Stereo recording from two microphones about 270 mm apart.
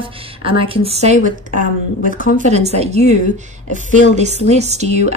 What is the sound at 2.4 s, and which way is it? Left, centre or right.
Speech, right.